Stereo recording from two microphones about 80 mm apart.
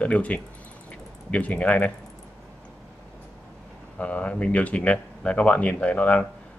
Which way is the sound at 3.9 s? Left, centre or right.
Centre.